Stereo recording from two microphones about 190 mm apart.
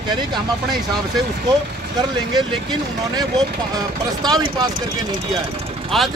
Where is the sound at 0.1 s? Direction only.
20° right (ahead or behind).